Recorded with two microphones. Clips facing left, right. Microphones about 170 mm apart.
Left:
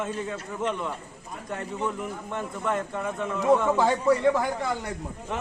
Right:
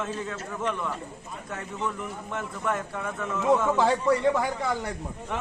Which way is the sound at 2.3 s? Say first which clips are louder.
Left 1 dB; 15° left (ahead or behind).